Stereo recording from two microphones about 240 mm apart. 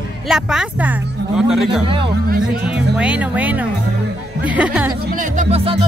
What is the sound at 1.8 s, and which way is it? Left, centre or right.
Speech, right.